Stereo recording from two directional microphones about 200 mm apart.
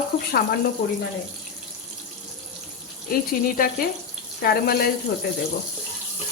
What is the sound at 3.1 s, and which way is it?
Speech, 45° left (ahead or behind).